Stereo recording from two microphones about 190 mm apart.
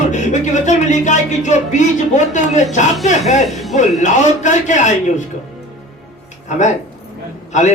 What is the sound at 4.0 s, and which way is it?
Speech, 40° left (ahead or behind).